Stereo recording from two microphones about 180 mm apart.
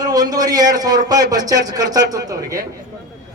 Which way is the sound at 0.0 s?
20° right (ahead or behind).